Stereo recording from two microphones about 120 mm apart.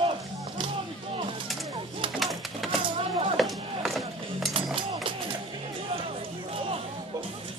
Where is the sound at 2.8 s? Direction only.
50° right (ahead or behind).